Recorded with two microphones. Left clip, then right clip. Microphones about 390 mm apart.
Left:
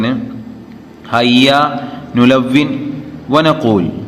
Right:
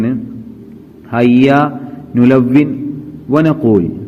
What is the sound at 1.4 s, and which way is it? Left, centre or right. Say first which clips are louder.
A man's voice: left 1 dB; centre.